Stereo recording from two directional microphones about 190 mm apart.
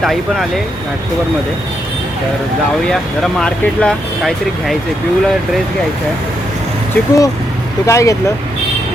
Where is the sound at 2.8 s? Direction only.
5° left (ahead or behind).